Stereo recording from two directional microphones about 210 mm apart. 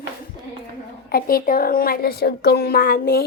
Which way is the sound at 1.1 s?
45° left (ahead or behind).